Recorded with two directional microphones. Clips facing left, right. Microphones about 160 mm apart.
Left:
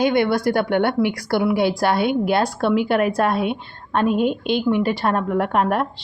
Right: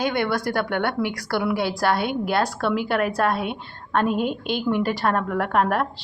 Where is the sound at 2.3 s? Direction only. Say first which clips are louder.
Left 4 dB; 15° left (ahead or behind).